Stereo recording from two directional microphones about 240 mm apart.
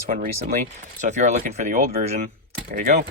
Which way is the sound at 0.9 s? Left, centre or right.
Right.